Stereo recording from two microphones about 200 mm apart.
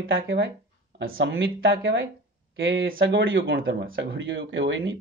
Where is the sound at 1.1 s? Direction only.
55° right (ahead or behind).